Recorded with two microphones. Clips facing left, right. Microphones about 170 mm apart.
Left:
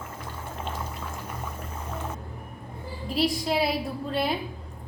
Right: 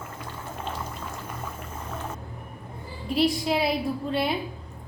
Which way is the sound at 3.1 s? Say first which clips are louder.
Right 2 dB; centre (ahead or behind).